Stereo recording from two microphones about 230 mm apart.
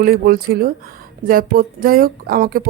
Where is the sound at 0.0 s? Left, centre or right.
Right.